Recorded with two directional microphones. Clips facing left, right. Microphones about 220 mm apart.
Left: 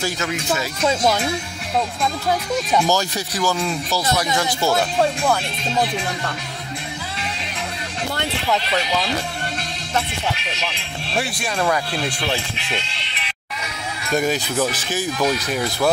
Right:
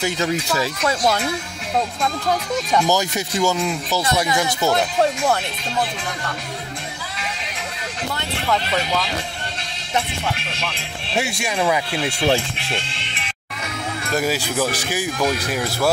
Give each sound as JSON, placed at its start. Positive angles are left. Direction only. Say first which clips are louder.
{"t": 0.2, "sound": "speech", "louder": "right 2 dB", "side_deg": -30}
{"t": 2.2, "sound": "speech", "louder": "left 1 dB", "side_deg": 10}
{"t": 2.9, "sound": "speech", "louder": "right 1 dB", "side_deg": -20}
{"t": 11.1, "sound": "speech", "louder": "right 1 dB", "side_deg": -10}
{"t": 12.3, "sound": "speech", "louder": "right 5 dB", "side_deg": -50}
{"t": 14.1, "sound": "speech", "louder": "left 1 dB", "side_deg": -5}